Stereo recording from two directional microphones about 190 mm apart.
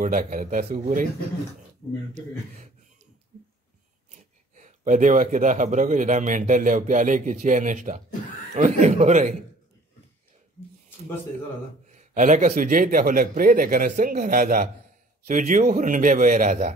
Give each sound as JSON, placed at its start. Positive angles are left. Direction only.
{"t": 0.0, "sound": "speech", "side_deg": -45}
{"t": 4.6, "sound": "speech", "side_deg": -40}
{"t": 11.9, "sound": "speech", "side_deg": -40}